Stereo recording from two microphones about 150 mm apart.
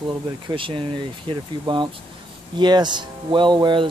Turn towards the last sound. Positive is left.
turn(degrees=-30)  # may be behind; listen again after turning